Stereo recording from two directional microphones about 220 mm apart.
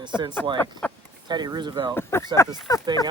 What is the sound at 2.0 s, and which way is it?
Speech, 10° left (ahead or behind).